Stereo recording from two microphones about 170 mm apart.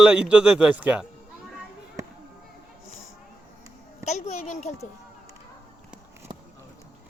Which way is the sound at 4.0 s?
40° left (ahead or behind).